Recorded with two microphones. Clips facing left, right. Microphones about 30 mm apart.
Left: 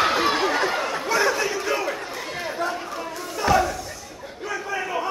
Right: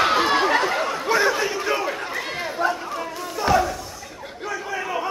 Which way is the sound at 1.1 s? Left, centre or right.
Centre.